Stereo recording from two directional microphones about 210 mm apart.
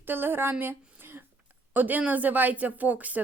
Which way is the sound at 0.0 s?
10° right (ahead or behind).